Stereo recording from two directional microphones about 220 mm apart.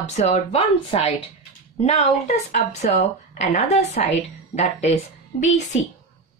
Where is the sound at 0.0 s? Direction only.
30° left (ahead or behind).